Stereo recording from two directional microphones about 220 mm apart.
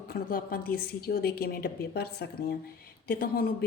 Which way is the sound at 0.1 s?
40° left (ahead or behind).